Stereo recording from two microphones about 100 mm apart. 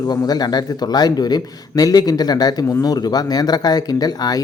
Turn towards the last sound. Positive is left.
turn(degrees=40)  # may be behind; listen again after turning